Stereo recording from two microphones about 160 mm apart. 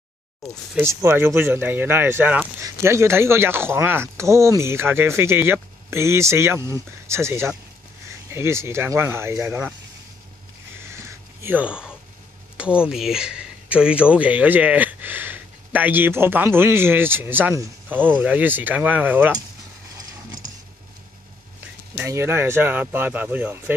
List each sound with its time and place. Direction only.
0.7 s speech: 15° right (ahead or behind)
11.0 s a sound: 10° right (ahead or behind)
12.5 s speech: 5° right (ahead or behind)
21.9 s speech: 15° right (ahead or behind)